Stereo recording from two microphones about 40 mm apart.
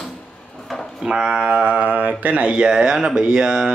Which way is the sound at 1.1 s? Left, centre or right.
Right.